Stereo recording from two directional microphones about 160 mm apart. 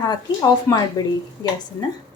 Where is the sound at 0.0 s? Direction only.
25° left (ahead or behind).